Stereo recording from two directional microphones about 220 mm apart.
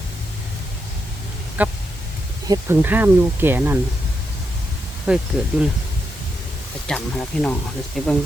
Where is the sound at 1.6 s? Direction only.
5° right (ahead or behind).